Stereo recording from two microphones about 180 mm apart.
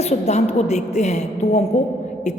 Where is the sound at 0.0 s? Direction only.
35° left (ahead or behind).